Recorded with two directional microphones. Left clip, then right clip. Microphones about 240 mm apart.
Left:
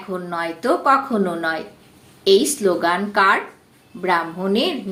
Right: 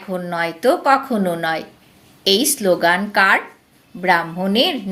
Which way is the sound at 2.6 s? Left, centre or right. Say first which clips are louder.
Right 3 dB; right.